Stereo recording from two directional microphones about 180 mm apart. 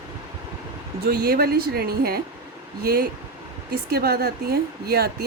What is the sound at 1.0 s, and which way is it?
A woman's voice, 60° right (ahead or behind).